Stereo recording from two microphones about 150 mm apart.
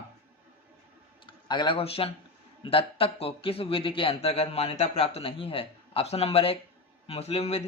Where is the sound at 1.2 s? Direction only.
30° left (ahead or behind).